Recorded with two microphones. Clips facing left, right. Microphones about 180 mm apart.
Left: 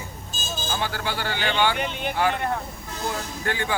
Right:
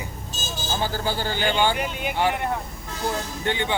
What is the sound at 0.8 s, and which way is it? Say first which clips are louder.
Speech: right 5 dB; 35° right (ahead or behind).